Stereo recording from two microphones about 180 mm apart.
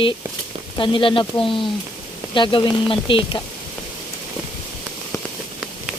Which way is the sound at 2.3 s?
25° left (ahead or behind).